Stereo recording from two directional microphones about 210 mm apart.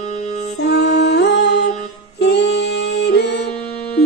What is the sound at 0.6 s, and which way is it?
Music, 50° left (ahead or behind).